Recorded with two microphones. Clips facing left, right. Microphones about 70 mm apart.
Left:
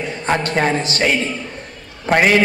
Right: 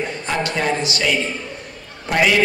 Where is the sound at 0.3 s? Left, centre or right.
Left.